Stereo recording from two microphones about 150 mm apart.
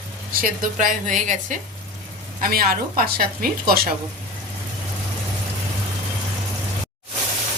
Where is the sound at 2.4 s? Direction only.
80° right.